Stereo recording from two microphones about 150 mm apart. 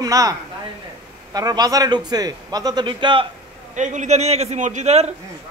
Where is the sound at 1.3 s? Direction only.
25° right (ahead or behind).